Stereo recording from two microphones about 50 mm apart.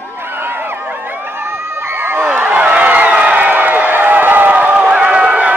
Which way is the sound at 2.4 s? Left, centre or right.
Right.